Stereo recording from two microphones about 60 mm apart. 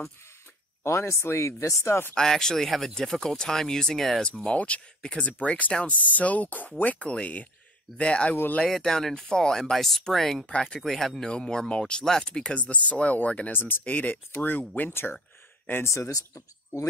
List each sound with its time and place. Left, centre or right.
0.8 s speech: left
2.1 s speech: centre
4.3 s speech: centre
5.7 s speech: centre
5.9 s speech: left
8.6 s speech: centre
10.8 s speech: centre; by 13.5 s left
13.5 s speech: left
15.7 s speech: left